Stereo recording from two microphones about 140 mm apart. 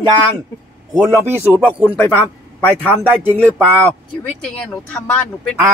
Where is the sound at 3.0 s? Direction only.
15° right (ahead or behind).